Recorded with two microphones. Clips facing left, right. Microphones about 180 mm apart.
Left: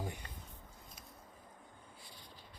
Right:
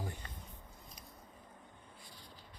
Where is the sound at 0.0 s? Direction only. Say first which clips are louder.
Left 1 dB; 15° left (ahead or behind).